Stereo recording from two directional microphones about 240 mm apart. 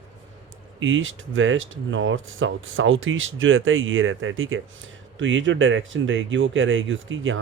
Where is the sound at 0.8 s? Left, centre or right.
Right.